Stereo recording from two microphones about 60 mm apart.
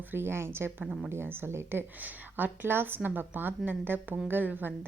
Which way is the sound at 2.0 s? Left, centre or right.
Right.